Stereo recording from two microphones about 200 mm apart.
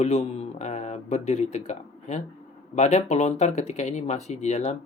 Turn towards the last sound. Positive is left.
turn(degrees=35)  # may be behind; listen again after turning